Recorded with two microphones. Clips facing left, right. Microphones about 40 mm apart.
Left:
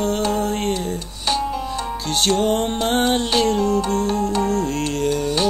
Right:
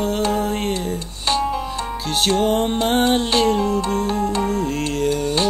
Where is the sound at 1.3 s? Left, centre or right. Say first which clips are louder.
Right 2 dB; right.